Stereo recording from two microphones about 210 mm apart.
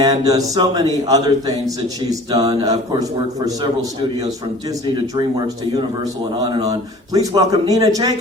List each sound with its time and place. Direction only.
0.0 s speech: 15° right (ahead or behind)
6.5 s speech: 15° right (ahead or behind)